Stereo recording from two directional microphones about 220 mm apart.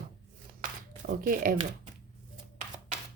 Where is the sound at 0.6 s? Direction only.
40° right (ahead or behind).